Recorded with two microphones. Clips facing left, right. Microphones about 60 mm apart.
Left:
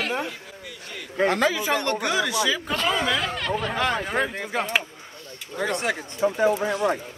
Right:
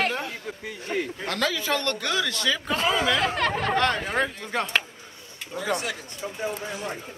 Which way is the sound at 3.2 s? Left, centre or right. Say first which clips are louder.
Right 2 dB; right.